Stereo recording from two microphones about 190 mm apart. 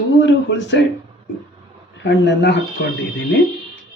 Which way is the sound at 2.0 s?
60° left (ahead or behind).